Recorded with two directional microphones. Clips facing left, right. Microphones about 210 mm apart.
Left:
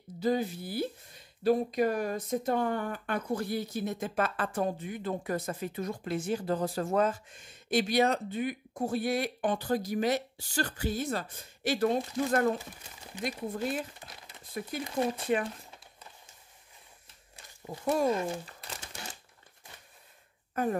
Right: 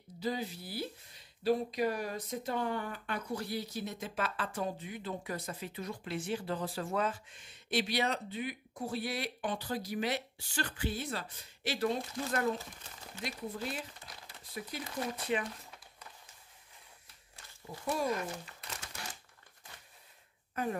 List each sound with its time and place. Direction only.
0.2 s speech: 50° left (ahead or behind)
12.5 s speech: 15° left (ahead or behind)
13.2 s speech: 50° left (ahead or behind)
18.0 s crumpling: 25° left (ahead or behind)